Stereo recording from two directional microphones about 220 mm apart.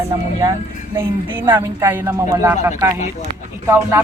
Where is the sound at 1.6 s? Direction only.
10° right (ahead or behind).